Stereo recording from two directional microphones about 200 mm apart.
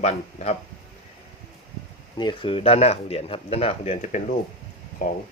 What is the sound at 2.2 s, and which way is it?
Speech, 25° left (ahead or behind).